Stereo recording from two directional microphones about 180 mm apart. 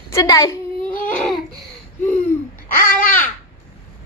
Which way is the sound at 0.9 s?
50° left (ahead or behind).